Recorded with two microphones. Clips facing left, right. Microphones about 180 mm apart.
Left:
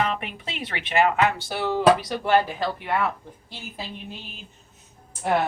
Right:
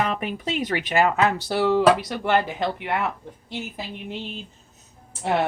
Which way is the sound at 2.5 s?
20° right (ahead or behind).